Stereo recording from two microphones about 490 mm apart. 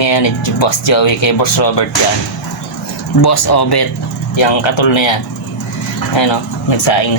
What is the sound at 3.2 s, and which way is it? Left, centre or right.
Speech, left.